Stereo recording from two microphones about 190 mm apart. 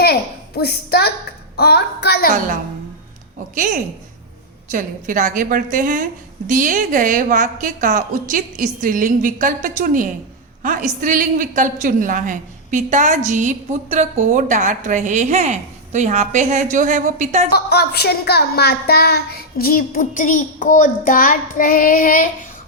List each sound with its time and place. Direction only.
0.0 s a sound: 55° left (ahead or behind)
1.5 s a woman's voice: 60° left (ahead or behind)
3.5 s a woman's voice: 45° right (ahead or behind)
17.5 s child singing: 60° left (ahead or behind)